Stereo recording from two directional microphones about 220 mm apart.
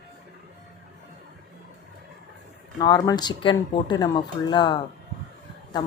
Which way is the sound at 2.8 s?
20° left (ahead or behind).